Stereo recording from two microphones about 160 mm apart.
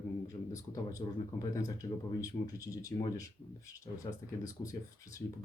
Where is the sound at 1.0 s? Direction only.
25° left (ahead or behind).